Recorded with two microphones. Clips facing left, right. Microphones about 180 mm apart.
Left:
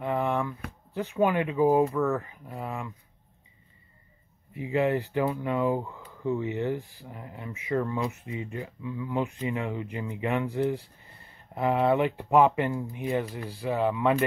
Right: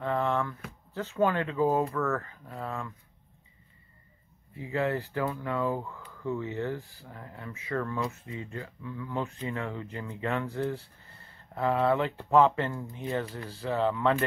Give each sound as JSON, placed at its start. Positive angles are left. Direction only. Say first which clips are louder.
{"t": 0.0, "sound": "speech", "louder": "left 1 dB", "side_deg": 15}
{"t": 4.6, "sound": "speech", "louder": "left 4 dB", "side_deg": 20}